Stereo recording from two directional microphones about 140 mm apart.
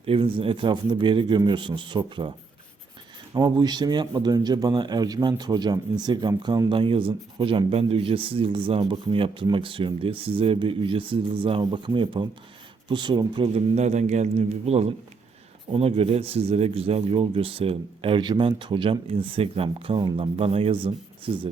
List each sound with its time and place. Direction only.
0.0 s speech: 40° right (ahead or behind)
3.3 s speech: 30° right (ahead or behind)
13.7 s speech: 55° right (ahead or behind); by 21.5 s 35° right (ahead or behind)